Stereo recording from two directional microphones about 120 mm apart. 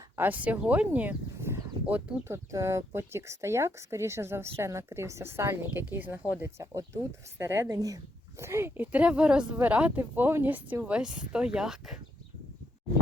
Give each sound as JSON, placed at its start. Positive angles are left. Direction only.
{"t": 0.2, "sound": "speech", "side_deg": -15}